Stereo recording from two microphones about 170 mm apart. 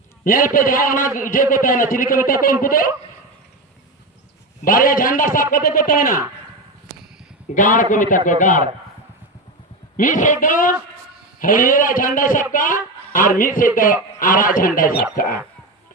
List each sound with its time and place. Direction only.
0.3 s a man's voice: 55° left (ahead or behind)
4.6 s a man's voice: 55° left (ahead or behind)
7.5 s a man's voice: 50° left (ahead or behind)
10.0 s a man's voice: 50° left (ahead or behind)